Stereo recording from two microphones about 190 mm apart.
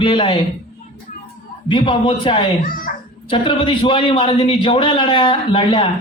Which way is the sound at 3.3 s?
25° left (ahead or behind).